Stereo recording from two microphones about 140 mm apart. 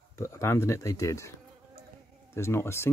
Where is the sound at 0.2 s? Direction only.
20° left (ahead or behind).